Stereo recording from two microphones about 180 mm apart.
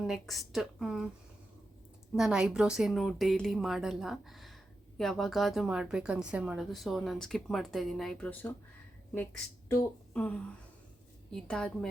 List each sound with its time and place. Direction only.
0.1 s a woman's voice: centre (ahead or behind)
2.1 s a woman's voice: 5° right (ahead or behind)
9.7 s a woman's voice: 10° left (ahead or behind)